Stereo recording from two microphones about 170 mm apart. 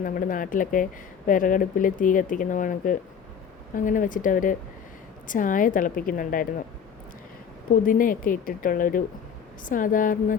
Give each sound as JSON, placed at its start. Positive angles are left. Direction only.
{"t": 0.0, "sound": "speech", "side_deg": 55}
{"t": 7.7, "sound": "speech", "side_deg": 55}